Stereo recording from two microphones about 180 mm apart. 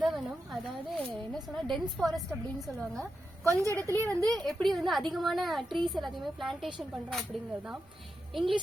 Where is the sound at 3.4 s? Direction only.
15° right (ahead or behind).